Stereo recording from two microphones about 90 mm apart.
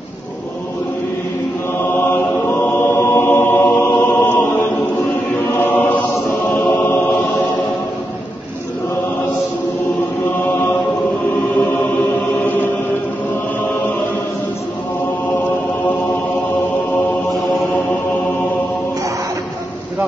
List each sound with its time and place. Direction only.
1.8 s chant: 25° left (ahead or behind)
5.6 s chant: 20° left (ahead or behind)